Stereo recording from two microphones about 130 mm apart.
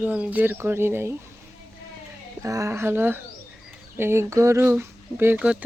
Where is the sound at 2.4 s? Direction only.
25° right (ahead or behind).